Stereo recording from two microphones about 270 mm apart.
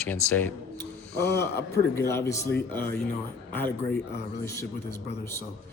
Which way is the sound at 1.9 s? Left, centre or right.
Centre.